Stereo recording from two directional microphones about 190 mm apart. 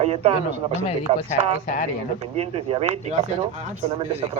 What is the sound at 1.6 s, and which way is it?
Speech, 40° left (ahead or behind).